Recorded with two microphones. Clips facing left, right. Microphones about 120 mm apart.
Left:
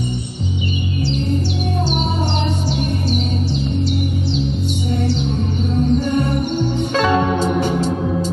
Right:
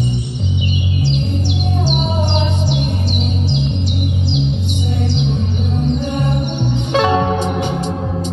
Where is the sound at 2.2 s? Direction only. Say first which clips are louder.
Right 2 dB; 45° left (ahead or behind).